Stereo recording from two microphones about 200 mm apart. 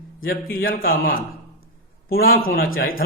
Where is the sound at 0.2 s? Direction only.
45° left (ahead or behind).